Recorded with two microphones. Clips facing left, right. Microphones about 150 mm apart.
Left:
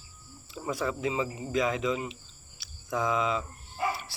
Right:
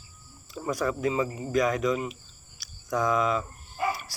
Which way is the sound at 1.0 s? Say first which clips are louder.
Right 3 dB; 45° right (ahead or behind).